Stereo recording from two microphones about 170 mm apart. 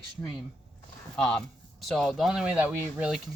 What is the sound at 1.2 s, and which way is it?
Speech, 5° left (ahead or behind).